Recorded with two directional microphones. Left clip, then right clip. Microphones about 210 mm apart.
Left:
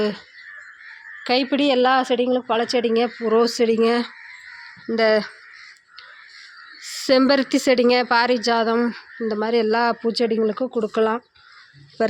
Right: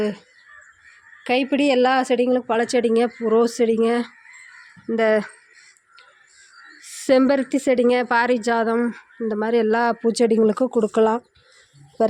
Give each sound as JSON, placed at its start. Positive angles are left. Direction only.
{"t": 1.2, "sound": "a woman's voice", "side_deg": -10}
{"t": 7.1, "sound": "a woman's voice", "side_deg": -10}